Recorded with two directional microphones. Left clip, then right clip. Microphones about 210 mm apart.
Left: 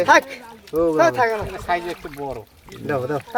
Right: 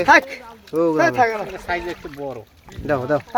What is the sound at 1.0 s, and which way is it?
Speech, 25° right (ahead or behind).